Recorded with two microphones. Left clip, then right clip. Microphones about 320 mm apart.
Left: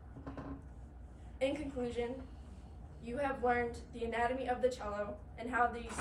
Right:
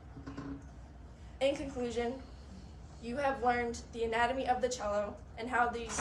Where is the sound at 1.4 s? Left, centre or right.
Centre.